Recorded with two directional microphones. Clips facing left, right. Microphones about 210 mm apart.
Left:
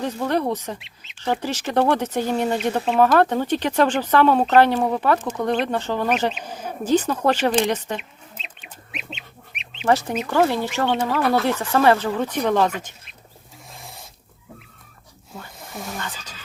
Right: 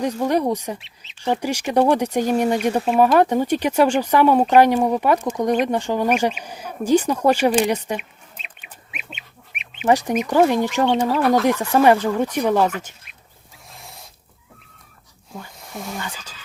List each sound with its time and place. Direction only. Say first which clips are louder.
0.0 s speech: right 3 dB; 15° right (ahead or behind)
6.8 s bird: right 3 dB; 10° right (ahead or behind)
9.8 s speech: right 2 dB; 15° right (ahead or behind)
13.7 s a sound: left 1 dB; centre (ahead or behind)
15.5 s snake: right 1 dB; centre (ahead or behind)
16.0 s speech: right 1 dB; 10° right (ahead or behind)